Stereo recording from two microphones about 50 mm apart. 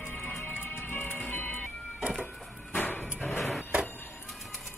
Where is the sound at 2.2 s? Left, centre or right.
Left.